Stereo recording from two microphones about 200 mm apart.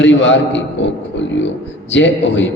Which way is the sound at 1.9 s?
65° left (ahead or behind).